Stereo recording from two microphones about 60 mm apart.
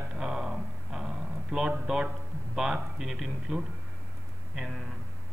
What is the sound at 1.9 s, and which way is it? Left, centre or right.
A man's voice, centre.